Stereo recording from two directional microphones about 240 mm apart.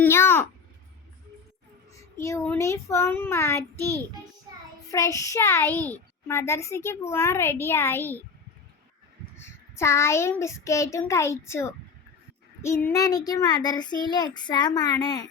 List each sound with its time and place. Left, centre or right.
0.0 s a child's voice: centre
1.9 s a child's voice: centre
9.4 s a child's voice: centre